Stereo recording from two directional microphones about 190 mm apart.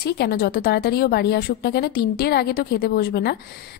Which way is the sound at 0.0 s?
55° left (ahead or behind).